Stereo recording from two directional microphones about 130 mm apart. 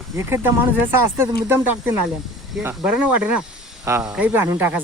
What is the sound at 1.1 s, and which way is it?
Speech, 15° right (ahead or behind).